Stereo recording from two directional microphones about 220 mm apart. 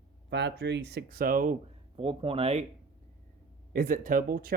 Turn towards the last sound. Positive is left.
turn(degrees=-40)  # may be behind; listen again after turning